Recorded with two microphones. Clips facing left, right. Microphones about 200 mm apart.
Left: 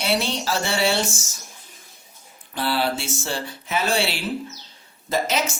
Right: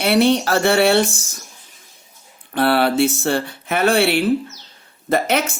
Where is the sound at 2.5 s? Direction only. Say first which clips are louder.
Right 7 dB; 60° right (ahead or behind).